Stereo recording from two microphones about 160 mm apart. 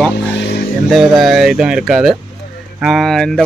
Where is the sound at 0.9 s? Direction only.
Centre (ahead or behind).